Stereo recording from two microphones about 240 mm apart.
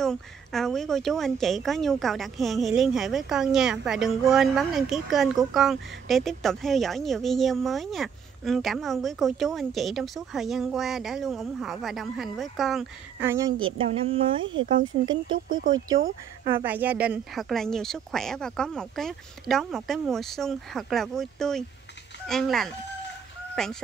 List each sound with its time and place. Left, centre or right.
0.0 s speech: centre
13.7 s speech: right
15.4 s speech: right
16.6 s speech: centre